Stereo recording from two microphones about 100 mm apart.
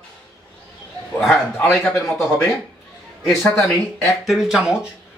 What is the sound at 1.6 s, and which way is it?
Speech, 10° left (ahead or behind).